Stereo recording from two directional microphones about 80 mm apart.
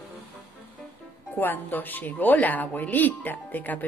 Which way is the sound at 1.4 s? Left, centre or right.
Left.